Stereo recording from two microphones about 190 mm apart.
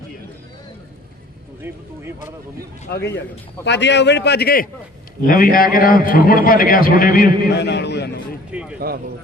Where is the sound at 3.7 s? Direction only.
65° left (ahead or behind).